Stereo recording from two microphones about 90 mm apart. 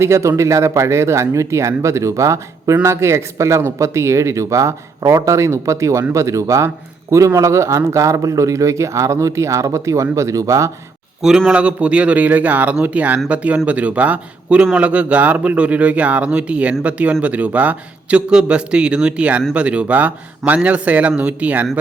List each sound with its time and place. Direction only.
0.0 s speech: 35° right (ahead or behind)
11.2 s a man's voice: 5° right (ahead or behind)